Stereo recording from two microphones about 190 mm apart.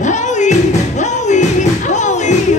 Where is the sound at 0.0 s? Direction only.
40° left (ahead or behind).